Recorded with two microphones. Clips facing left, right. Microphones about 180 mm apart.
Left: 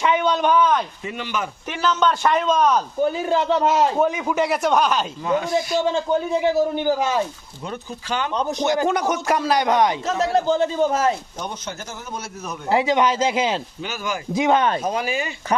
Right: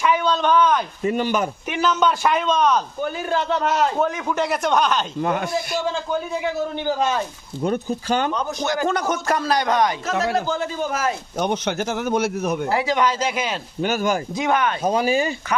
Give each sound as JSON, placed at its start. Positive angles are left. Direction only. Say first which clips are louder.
{"t": 0.0, "sound": "a sound", "louder": "even", "side_deg": 20}
{"t": 1.0, "sound": "speech", "louder": "right 7 dB", "side_deg": -45}
{"t": 1.7, "sound": "a man's voice", "louder": "even", "side_deg": -10}
{"t": 3.0, "sound": "a man's voice", "louder": "left 4 dB", "side_deg": 20}
{"t": 4.0, "sound": "a man's voice", "louder": "left 2 dB", "side_deg": 5}
{"t": 5.2, "sound": "a man's voice", "louder": "left 1 dB", "side_deg": -55}
{"t": 6.8, "sound": "speech", "louder": "left 1 dB", "side_deg": 15}
{"t": 7.6, "sound": "speech", "louder": "right 9 dB", "side_deg": -45}
{"t": 8.6, "sound": "a man's voice", "louder": "left 2 dB", "side_deg": 20}
{"t": 11.3, "sound": "a man's voice", "louder": "right 9 dB", "side_deg": -75}
{"t": 12.6, "sound": "a man's voice", "louder": "left 5 dB", "side_deg": 20}
{"t": 13.8, "sound": "speech", "louder": "right 12 dB", "side_deg": -50}
{"t": 14.3, "sound": "a man's voice", "louder": "left 3 dB", "side_deg": 20}
{"t": 14.8, "sound": "speech", "louder": "right 5 dB", "side_deg": -35}